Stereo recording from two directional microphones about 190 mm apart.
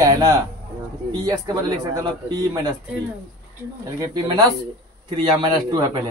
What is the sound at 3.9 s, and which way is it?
Speech, 20° right (ahead or behind).